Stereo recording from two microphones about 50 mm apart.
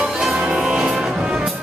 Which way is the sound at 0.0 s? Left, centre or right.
Centre.